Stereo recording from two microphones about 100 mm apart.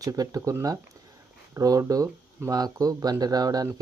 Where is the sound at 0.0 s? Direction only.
35° right (ahead or behind).